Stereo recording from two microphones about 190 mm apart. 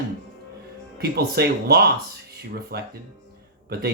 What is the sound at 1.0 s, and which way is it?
Speech, 55° right (ahead or behind).